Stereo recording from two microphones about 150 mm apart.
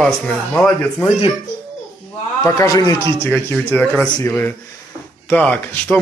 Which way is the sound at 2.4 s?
20° left (ahead or behind).